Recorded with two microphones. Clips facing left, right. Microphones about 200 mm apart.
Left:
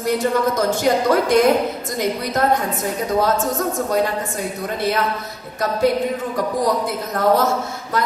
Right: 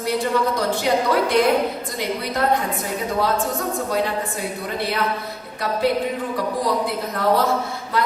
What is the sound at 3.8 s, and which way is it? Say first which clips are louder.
Speech: left 3 dB; 45° left (ahead or behind).